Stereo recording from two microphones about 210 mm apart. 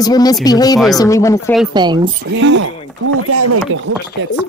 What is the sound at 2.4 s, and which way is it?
Speech, 60° right (ahead or behind).